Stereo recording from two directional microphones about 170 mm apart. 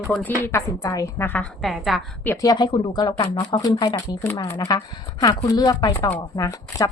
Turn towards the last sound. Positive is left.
turn(degrees=20)  # may be behind; listen again after turning